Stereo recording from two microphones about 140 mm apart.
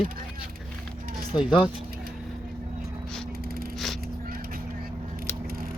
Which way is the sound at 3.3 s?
90° right.